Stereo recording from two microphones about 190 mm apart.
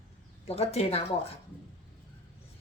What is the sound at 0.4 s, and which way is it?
Speech, 30° left (ahead or behind).